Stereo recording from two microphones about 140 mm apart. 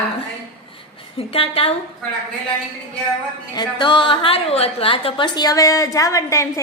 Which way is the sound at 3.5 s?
30° left (ahead or behind).